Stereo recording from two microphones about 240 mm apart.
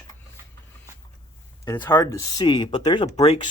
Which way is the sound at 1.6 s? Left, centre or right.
Centre.